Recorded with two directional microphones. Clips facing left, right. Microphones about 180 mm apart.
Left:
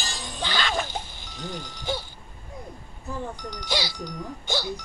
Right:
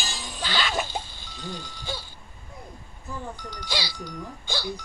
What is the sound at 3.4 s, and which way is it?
Music, 20° left (ahead or behind).